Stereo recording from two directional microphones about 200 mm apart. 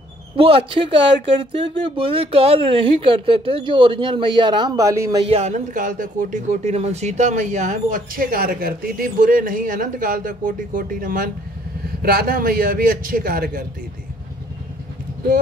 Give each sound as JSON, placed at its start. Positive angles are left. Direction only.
{"t": 0.4, "sound": "speech", "side_deg": -25}
{"t": 5.2, "sound": "speech", "side_deg": -30}